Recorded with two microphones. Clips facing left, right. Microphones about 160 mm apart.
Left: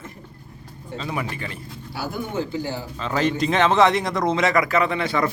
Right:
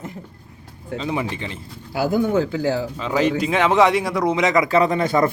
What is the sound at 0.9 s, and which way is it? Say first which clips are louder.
Speech: right 4 dB; 20° right (ahead or behind).